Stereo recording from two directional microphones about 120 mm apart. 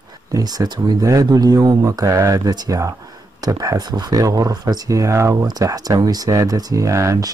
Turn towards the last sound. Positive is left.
turn(degrees=-25)  # may be behind; listen again after turning